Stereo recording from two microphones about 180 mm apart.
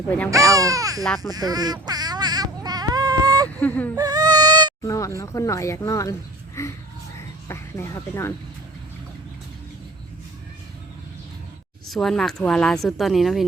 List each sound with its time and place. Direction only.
0.5 s speech: 20° right (ahead or behind)
1.0 s a woman's voice: centre (ahead or behind)
1.3 s a sound: 20° right (ahead or behind)
3.5 s whimper: 10° left (ahead or behind)
3.9 s baby cry: 20° right (ahead or behind)
4.8 s speech: 20° left (ahead or behind)
11.9 s a woman's voice: centre (ahead or behind)